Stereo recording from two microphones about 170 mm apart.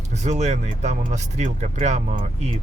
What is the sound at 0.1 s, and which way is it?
Speech, 40° right (ahead or behind).